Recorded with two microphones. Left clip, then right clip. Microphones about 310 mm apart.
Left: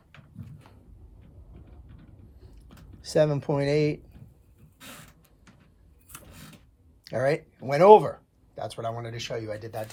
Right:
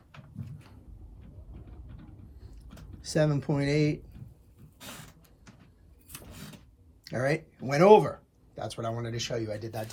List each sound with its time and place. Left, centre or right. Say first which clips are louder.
3.0 s speech: left 5 dB; centre
6.1 s a sound: even; centre
7.0 s speech: left 4 dB; centre